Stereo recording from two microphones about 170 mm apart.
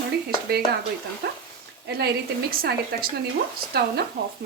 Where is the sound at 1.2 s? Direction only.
75° right (ahead or behind).